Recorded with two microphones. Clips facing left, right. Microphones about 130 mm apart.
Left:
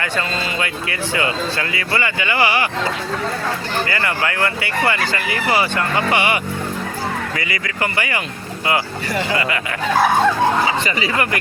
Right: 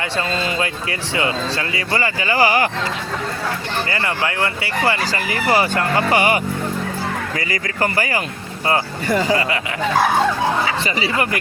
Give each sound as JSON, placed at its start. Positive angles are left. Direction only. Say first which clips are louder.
{"t": 0.0, "sound": "speech", "louder": "right 1 dB", "side_deg": -25}
{"t": 3.8, "sound": "speech", "louder": "left 1 dB", "side_deg": -25}
{"t": 10.8, "sound": "speech", "louder": "even", "side_deg": -30}